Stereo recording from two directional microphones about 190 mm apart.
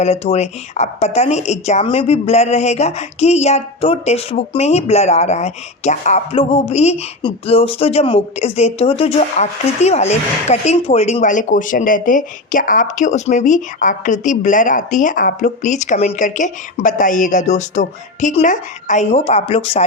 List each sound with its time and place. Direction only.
0.0 s a woman's voice: 35° left (ahead or behind)